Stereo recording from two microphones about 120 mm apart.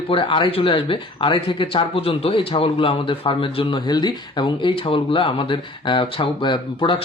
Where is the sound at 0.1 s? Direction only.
45° left (ahead or behind).